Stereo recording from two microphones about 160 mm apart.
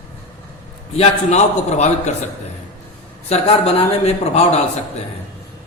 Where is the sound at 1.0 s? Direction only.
45° left (ahead or behind).